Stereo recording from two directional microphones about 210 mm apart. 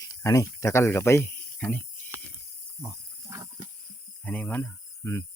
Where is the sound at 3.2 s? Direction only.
15° right (ahead or behind).